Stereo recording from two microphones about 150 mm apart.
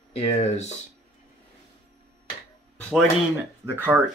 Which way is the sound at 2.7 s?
5° left (ahead or behind).